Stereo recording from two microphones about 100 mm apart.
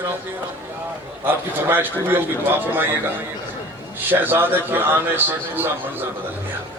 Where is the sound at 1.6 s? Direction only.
20° right (ahead or behind).